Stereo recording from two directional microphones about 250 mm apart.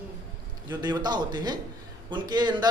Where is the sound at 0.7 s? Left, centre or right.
Centre.